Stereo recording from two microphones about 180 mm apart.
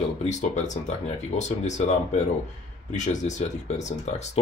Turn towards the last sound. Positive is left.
turn(degrees=40)  # may be behind; listen again after turning